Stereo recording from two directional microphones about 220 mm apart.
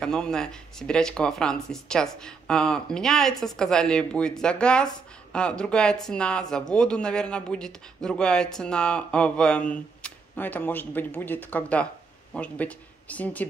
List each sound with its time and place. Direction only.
0.0 s speech: 5° left (ahead or behind)